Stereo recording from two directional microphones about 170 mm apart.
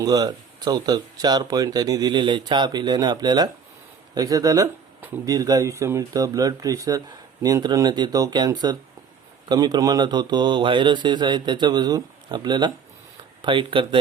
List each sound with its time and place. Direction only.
0.0 s speech: 25° right (ahead or behind)